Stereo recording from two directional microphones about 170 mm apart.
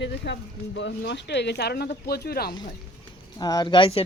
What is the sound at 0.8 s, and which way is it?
Speech, 90° left.